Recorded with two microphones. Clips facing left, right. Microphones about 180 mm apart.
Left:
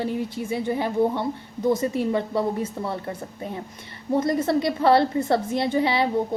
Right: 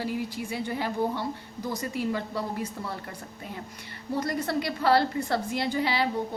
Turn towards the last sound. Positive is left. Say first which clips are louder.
# left 5 dB
turn(degrees=25)  # may be behind; listen again after turning